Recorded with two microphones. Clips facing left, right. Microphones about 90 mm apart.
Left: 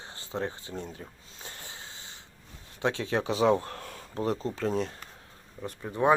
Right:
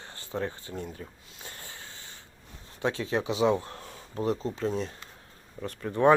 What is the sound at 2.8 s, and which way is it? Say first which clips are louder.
Speech: even; 30° left (ahead or behind).